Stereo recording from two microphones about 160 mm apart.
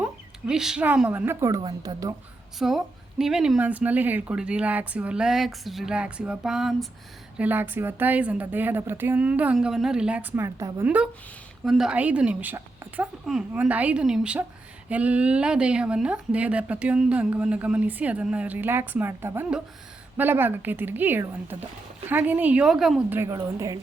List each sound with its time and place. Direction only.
0.0 s speech: 5° right (ahead or behind); by 2.1 s 25° right (ahead or behind)
2.6 s a woman's voice: centre (ahead or behind)
23.0 s a woman's voice: 15° right (ahead or behind)